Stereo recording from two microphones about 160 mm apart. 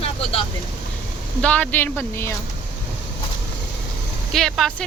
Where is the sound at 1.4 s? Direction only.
5° left (ahead or behind).